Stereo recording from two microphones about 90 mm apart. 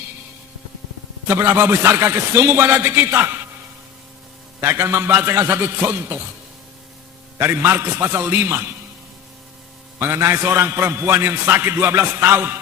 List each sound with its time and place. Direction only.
1.3 s a man's voice: 30° right (ahead or behind)
4.6 s a man's voice: 25° right (ahead or behind)
7.3 s a man's voice: 25° right (ahead or behind)
10.0 s a man's voice: 30° right (ahead or behind)